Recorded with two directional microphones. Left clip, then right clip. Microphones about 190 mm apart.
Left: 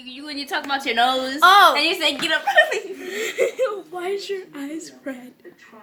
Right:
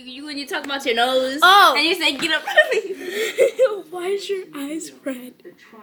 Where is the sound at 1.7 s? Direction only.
20° left (ahead or behind).